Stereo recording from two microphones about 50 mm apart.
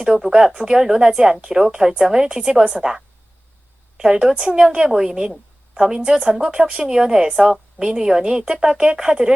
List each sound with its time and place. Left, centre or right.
0.0 s speech: centre
2.7 s a woman's voice: centre